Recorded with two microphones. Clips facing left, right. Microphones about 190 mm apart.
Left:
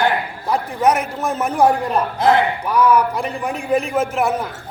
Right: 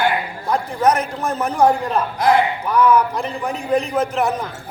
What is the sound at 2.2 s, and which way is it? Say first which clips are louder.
Speech: even; 20° left (ahead or behind).